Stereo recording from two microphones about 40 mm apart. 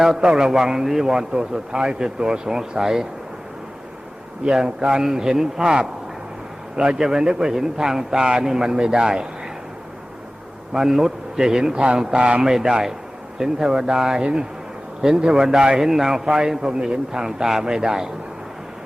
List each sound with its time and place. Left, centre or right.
0.0 s a man's voice: centre
1.3 s a man's voice: right
4.4 s a man's voice: centre
10.7 s speech: centre
11.7 s a man's voice: right
12.4 s a man's voice: centre